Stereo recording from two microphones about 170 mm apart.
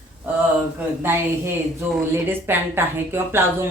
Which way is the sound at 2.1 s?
15° right (ahead or behind).